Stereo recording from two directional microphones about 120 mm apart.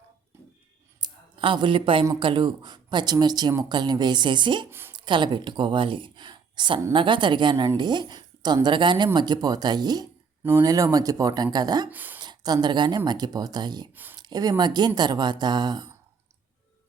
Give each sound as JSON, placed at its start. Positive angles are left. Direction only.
{"t": 1.0, "sound": "a woman's voice", "side_deg": -40}
{"t": 11.9, "sound": "speech", "side_deg": -15}
{"t": 12.2, "sound": "a woman's voice", "side_deg": -35}
{"t": 13.9, "sound": "speech", "side_deg": -15}
{"t": 14.2, "sound": "a woman's voice", "side_deg": -35}